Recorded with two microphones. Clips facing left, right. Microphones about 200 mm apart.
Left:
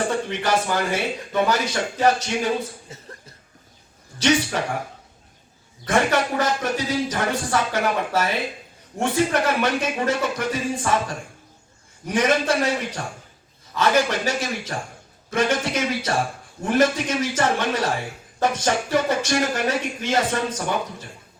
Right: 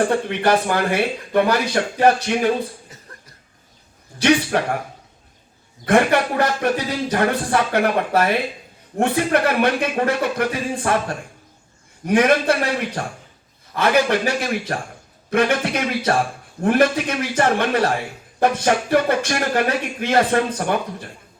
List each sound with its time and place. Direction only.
0.0 s speech: 55° right (ahead or behind)
2.9 s cough: 25° left (ahead or behind)
4.2 s speech: 60° right (ahead or behind)
5.8 s speech: 55° right (ahead or behind)
12.0 s speech: 60° right (ahead or behind)